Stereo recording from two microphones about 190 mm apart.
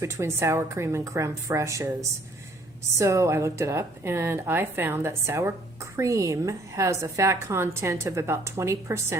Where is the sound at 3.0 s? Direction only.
15° right (ahead or behind).